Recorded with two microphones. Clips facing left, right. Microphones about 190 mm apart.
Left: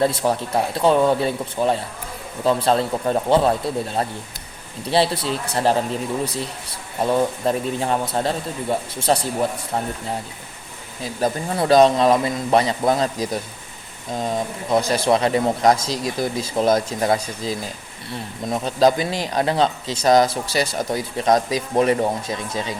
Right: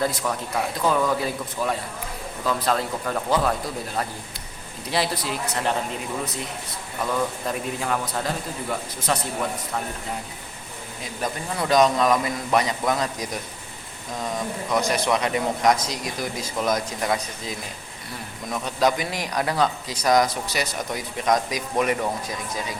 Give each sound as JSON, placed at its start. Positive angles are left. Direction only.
{"t": 0.0, "sound": "speech", "side_deg": 30}
{"t": 7.0, "sound": "speech", "side_deg": 30}
{"t": 11.2, "sound": "speech", "side_deg": 35}